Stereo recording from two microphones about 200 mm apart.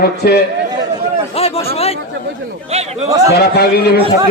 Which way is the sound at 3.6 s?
55° left (ahead or behind).